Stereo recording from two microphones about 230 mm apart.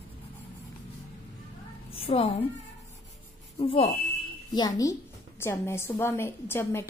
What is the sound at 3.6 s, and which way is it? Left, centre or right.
Speech, left.